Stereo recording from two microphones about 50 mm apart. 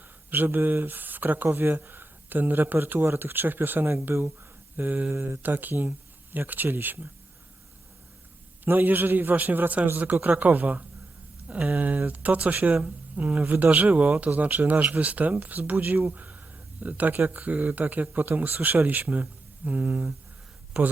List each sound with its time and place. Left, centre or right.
0.3 s speech: right
1.5 s speech: right
4.1 s speech: right
4.8 s speech: right
8.6 s speech: right